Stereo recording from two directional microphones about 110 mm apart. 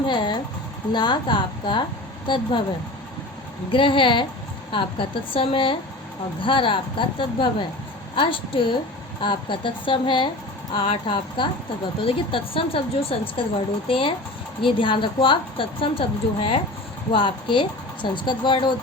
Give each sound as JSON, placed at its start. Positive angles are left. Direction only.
{"t": 0.0, "sound": "speech", "side_deg": 45}
{"t": 3.7, "sound": "speech", "side_deg": 50}